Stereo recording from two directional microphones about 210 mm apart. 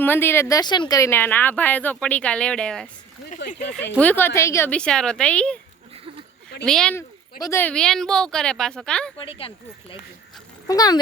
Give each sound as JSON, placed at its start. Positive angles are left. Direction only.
{"t": 0.0, "sound": "a woman's voice", "side_deg": 10}
{"t": 3.9, "sound": "a woman's voice", "side_deg": 10}
{"t": 6.7, "sound": "a woman's voice", "side_deg": 5}
{"t": 9.1, "sound": "speech", "side_deg": 25}
{"t": 10.7, "sound": "a woman's voice", "side_deg": 20}